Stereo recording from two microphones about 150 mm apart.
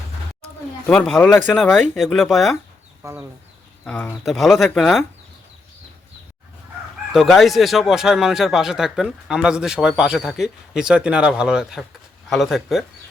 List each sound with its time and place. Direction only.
0.9 s speech: 5° left (ahead or behind)
3.0 s speech: 15° right (ahead or behind)
3.8 s speech: 10° left (ahead or behind)
7.1 s speech: centre (ahead or behind)